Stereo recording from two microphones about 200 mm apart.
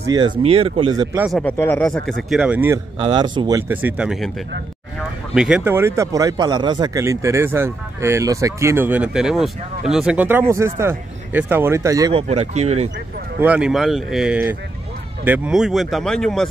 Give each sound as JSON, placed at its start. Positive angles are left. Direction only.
{"t": 0.0, "sound": "speech", "side_deg": -20}
{"t": 0.3, "sound": "speech", "side_deg": -30}
{"t": 1.1, "sound": "speech", "side_deg": -5}
{"t": 1.4, "sound": "speech", "side_deg": 10}
{"t": 3.0, "sound": "speech", "side_deg": -20}
{"t": 5.3, "sound": "speech", "side_deg": -5}
{"t": 12.1, "sound": "speech", "side_deg": -30}
{"t": 13.4, "sound": "speech", "side_deg": -5}